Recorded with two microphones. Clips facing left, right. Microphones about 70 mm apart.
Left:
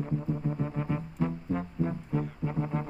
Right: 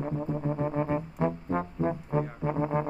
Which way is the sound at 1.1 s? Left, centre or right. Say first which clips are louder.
Right 3 dB; right.